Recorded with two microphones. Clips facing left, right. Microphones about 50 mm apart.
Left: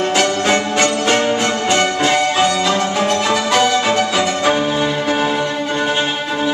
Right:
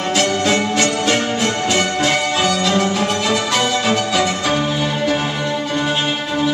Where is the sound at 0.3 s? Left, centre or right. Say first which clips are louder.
Left 1 dB; left.